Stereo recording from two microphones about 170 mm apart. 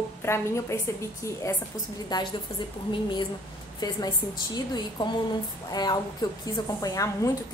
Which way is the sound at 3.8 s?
25° left (ahead or behind).